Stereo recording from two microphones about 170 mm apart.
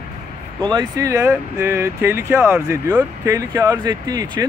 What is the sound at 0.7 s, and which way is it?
Speech, 20° right (ahead or behind).